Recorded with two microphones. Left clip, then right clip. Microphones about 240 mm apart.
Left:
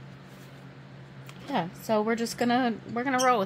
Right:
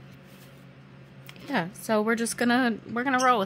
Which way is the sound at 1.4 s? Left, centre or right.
Right.